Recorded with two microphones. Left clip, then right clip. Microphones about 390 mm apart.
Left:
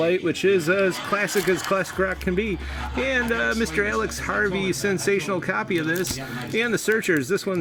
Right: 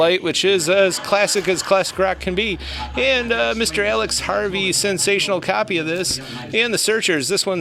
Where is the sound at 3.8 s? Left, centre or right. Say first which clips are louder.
Right 5 dB; centre.